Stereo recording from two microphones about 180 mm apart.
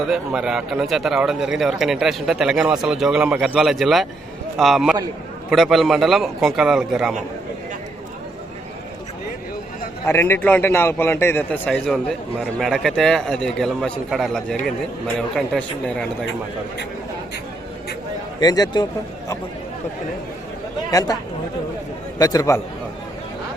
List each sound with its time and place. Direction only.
0.1 s speech: 5° right (ahead or behind)
10.1 s a man's voice: 15° left (ahead or behind)
18.3 s a man's voice: 20° left (ahead or behind)
20.9 s a man's voice: 20° left (ahead or behind)
22.2 s a man's voice: 20° left (ahead or behind)